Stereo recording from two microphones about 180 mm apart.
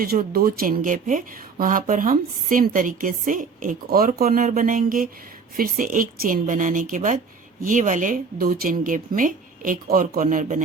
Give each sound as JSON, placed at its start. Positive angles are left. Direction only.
{"t": 0.0, "sound": "speech", "side_deg": -55}